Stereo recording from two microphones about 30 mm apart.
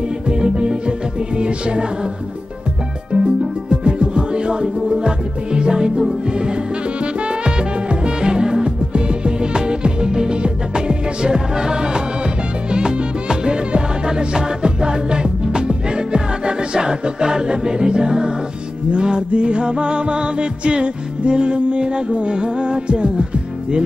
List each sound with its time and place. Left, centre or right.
0.3 s music: right
3.1 s music: right
7.0 s music: right